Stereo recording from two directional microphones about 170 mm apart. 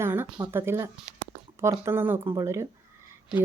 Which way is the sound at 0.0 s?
15° right (ahead or behind).